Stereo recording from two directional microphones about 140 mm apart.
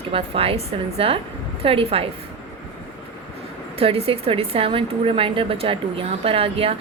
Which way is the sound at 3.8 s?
45° right (ahead or behind).